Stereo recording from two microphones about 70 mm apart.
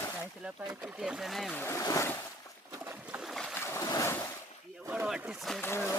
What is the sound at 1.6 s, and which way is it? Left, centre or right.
Speech, left.